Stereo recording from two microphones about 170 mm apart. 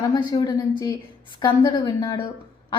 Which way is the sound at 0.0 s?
25° left (ahead or behind).